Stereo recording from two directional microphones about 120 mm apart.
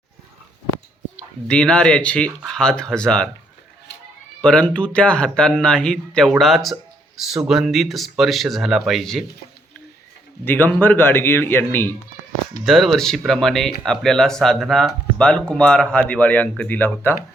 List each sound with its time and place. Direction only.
1.5 s speech: 5° left (ahead or behind)
4.4 s speech: 5° left (ahead or behind)
10.4 s speech: 15° left (ahead or behind)
12.6 s speech: centre (ahead or behind); by 17.2 s 15° left (ahead or behind)